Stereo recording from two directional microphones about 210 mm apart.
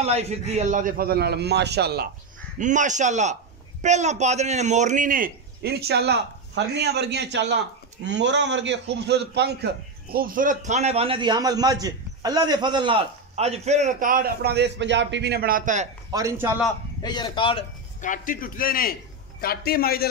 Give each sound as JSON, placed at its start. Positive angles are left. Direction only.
{"t": 0.0, "sound": "a man's voice", "side_deg": -30}
{"t": 2.6, "sound": "a man's voice", "side_deg": -35}
{"t": 16.1, "sound": "a man's voice", "side_deg": -15}
{"t": 17.0, "sound": "a man's voice", "side_deg": 20}
{"t": 18.0, "sound": "a man's voice", "side_deg": 40}